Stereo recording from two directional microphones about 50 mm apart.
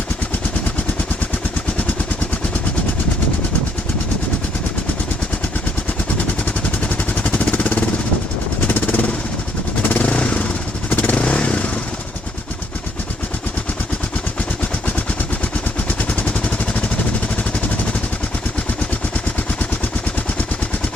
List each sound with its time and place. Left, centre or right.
6.8 s vehicle: left
8.6 s jackhammer: left
9.8 s motorcycle: left
10.8 s motorcycle: left
11.1 s motorcycle: left
16.0 s vehicle: left